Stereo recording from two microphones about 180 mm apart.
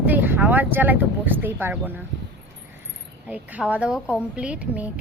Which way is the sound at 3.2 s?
5° right (ahead or behind).